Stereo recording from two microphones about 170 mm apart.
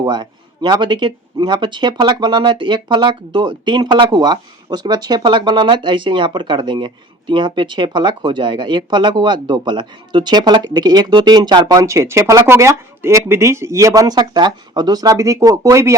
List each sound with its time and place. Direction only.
0.0 s speech: 25° right (ahead or behind)